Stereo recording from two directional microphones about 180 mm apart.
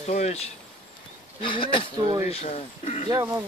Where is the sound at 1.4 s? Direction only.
30° left (ahead or behind).